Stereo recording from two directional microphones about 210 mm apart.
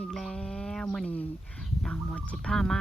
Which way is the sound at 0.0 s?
5° left (ahead or behind).